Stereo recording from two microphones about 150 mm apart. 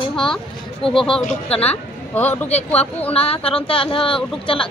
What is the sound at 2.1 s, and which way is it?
Speech, 15° left (ahead or behind).